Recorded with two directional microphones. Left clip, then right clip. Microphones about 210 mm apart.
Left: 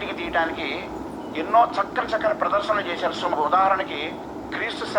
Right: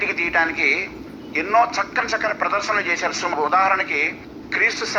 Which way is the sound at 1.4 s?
15° right (ahead or behind).